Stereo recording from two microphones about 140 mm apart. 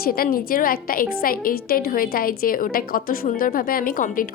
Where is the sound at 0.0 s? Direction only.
90° left.